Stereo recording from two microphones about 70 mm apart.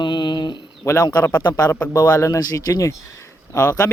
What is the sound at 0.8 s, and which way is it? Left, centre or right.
Speech, left.